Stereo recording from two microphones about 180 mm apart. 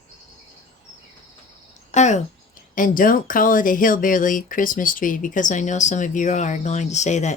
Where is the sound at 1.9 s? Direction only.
40° left (ahead or behind).